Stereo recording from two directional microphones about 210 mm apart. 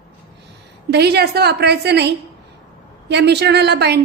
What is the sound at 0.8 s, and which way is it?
A woman's voice, 50° right (ahead or behind).